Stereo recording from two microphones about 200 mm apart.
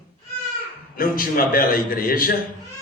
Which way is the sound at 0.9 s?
45° left (ahead or behind).